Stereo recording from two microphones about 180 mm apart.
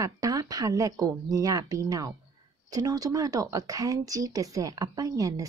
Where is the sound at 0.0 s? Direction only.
20° right (ahead or behind).